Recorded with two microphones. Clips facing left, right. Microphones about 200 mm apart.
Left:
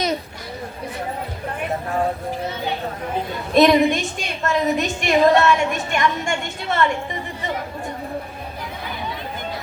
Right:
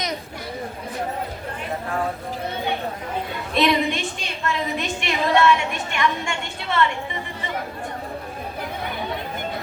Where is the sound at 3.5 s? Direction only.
45° left (ahead or behind).